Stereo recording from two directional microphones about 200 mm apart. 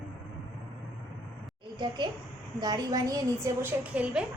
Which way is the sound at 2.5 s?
20° right (ahead or behind).